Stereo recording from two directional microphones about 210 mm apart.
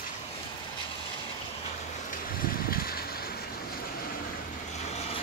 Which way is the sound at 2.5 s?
45° left (ahead or behind).